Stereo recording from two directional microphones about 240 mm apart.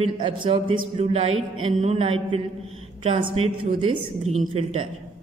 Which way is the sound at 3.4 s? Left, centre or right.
Right.